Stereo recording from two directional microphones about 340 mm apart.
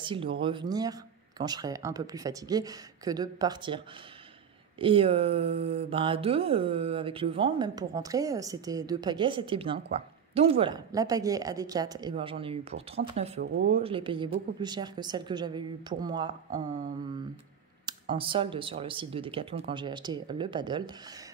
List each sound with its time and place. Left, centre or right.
0.0 s speech: centre
17.8 s speech: centre